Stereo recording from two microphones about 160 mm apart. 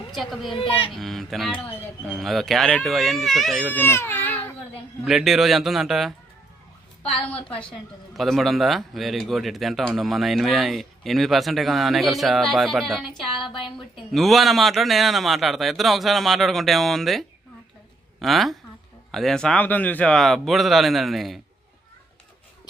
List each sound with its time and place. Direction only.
0.1 s speech: centre (ahead or behind)
0.5 s a woman's voice: 35° left (ahead or behind)
0.9 s speech: centre (ahead or behind)
3.8 s speech: 15° left (ahead or behind)
5.0 s speech: centre (ahead or behind)
7.1 s a woman's voice: 35° left (ahead or behind)
8.1 s speech: centre (ahead or behind)